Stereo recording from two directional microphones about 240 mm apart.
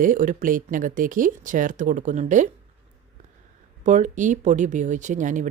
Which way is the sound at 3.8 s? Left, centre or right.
Right.